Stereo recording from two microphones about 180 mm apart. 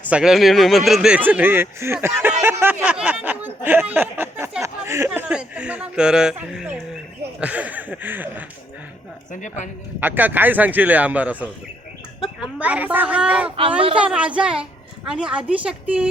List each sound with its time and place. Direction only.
0.1 s speech: 5° right (ahead or behind)
9.3 s speech: 45° left (ahead or behind)
10.0 s a woman's voice: 10° right (ahead or behind)